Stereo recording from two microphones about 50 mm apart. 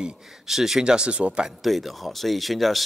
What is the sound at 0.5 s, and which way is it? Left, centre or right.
Speech, centre.